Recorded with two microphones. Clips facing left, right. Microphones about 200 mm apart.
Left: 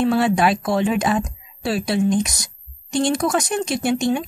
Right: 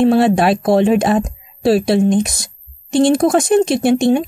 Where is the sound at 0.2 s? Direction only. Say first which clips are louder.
Right 5 dB; 50° right (ahead or behind).